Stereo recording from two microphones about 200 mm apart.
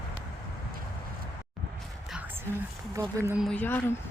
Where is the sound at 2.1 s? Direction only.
5° right (ahead or behind).